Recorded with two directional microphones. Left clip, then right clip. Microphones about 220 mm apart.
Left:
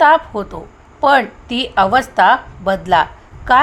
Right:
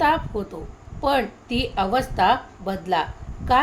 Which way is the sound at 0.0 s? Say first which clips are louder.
Left 10 dB; 15° left (ahead or behind).